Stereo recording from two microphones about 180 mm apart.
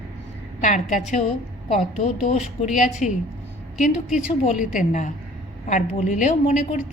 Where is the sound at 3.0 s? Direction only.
40° left (ahead or behind).